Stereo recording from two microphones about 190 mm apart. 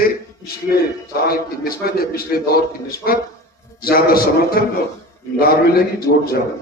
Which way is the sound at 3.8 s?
50° left (ahead or behind).